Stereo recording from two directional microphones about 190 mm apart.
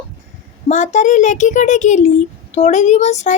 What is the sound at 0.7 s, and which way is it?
A child's voice, 40° left (ahead or behind).